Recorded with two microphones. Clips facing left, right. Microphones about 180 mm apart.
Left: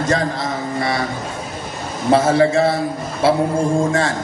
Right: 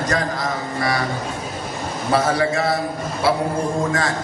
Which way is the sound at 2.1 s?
25° left (ahead or behind).